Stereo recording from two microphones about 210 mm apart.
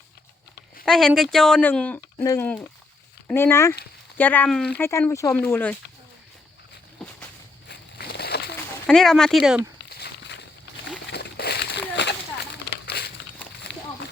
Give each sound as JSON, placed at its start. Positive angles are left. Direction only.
{"t": 0.9, "sound": "speech", "side_deg": 0}
{"t": 7.7, "sound": "slosh", "side_deg": 50}
{"t": 8.9, "sound": "speech", "side_deg": 0}
{"t": 9.9, "sound": "walk", "side_deg": 50}
{"t": 11.0, "sound": "a sound", "side_deg": 50}